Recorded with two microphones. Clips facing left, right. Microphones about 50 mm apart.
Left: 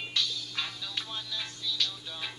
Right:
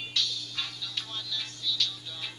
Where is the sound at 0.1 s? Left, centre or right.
Left.